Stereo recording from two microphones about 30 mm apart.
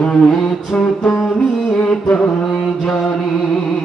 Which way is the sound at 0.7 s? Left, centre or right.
Left.